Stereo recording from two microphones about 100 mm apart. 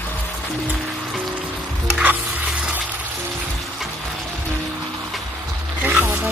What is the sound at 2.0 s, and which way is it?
Music, 15° right (ahead or behind).